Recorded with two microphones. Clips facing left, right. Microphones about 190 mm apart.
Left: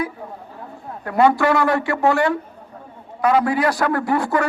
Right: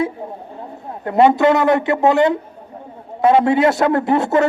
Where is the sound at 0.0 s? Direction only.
25° right (ahead or behind).